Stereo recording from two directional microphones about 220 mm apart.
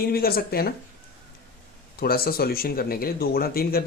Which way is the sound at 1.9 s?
45° left (ahead or behind).